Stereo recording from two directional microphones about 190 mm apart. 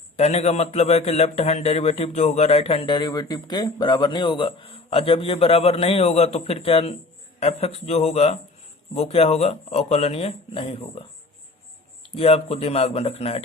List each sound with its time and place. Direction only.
0.2 s a man's voice: 35° left (ahead or behind)
12.0 s a man's voice: 30° left (ahead or behind)